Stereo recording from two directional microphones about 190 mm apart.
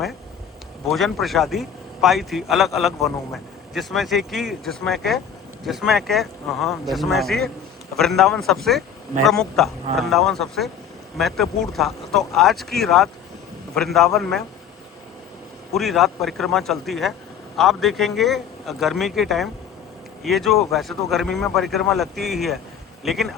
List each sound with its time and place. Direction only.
0.9 s speech: centre (ahead or behind)
15.7 s speech: centre (ahead or behind)